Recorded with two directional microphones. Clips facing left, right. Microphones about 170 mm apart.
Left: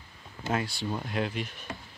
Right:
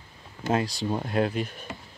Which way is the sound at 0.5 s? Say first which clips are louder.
Right 5 dB; 35° right (ahead or behind).